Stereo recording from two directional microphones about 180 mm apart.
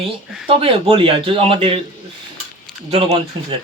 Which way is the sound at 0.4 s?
30° right (ahead or behind).